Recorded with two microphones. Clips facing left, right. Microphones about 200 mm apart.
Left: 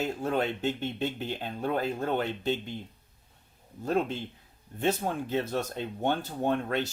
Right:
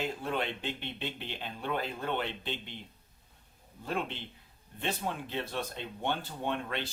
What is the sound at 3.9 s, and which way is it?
Speech, 40° left (ahead or behind).